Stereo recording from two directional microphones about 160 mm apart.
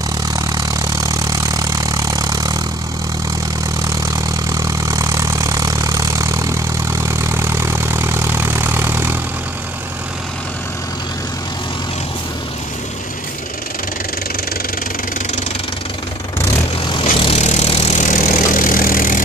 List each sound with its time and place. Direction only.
0.4 s vehicle: 20° right (ahead or behind)
3.8 s vehicle: 20° right (ahead or behind)
17.0 s vehicle: 40° left (ahead or behind)
18.1 s vehicle: 70° left (ahead or behind)